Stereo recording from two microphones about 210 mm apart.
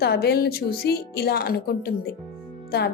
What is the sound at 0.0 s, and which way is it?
Speech, 50° left (ahead or behind).